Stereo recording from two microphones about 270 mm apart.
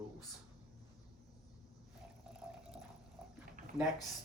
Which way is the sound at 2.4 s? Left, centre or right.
Centre.